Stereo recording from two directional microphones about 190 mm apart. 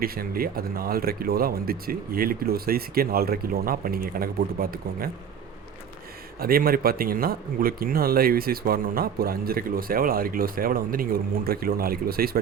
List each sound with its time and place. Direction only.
0.0 s speech: 50° right (ahead or behind)
6.4 s speech: 50° right (ahead or behind)